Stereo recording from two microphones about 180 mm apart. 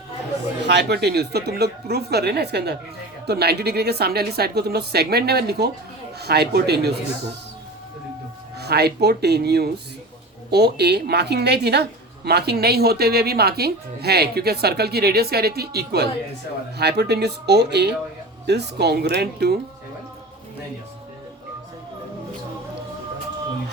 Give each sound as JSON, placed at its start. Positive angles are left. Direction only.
{"t": 0.6, "sound": "a woman's voice", "side_deg": -70}
{"t": 8.5, "sound": "a woman's voice", "side_deg": -65}